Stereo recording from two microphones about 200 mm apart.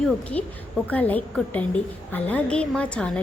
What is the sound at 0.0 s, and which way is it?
A woman's voice, 5° left (ahead or behind).